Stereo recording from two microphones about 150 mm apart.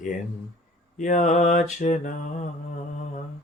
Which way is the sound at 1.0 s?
55° left (ahead or behind).